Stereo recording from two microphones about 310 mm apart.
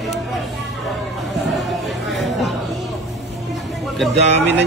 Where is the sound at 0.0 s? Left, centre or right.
Centre.